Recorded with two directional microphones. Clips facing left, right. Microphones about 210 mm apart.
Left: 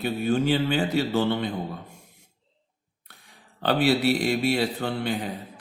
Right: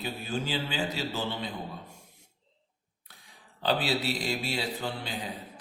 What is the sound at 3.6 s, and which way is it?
Speech, 60° left (ahead or behind).